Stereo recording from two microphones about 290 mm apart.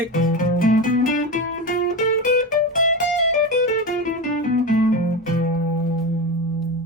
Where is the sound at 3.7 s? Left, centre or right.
Left.